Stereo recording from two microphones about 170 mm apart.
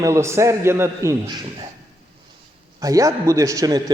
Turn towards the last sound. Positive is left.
turn(degrees=-20)  # may be behind; listen again after turning